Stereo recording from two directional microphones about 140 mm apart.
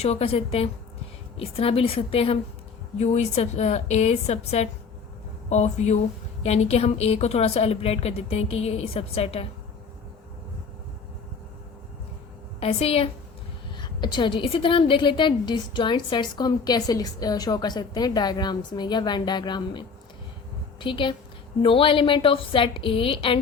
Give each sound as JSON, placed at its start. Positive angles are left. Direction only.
{"t": 0.0, "sound": "a woman's voice", "side_deg": 45}
{"t": 12.5, "sound": "a woman's voice", "side_deg": 45}
{"t": 13.7, "sound": "a woman's voice", "side_deg": 30}